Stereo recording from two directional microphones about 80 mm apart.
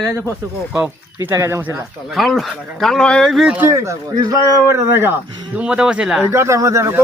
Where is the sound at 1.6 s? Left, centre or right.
Right.